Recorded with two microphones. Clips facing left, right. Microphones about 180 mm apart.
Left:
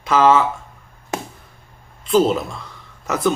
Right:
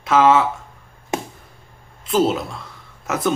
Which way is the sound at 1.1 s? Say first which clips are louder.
Right 2 dB; 20° right (ahead or behind).